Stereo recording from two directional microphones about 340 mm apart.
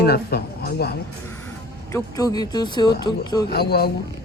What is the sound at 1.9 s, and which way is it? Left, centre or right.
Speech, centre.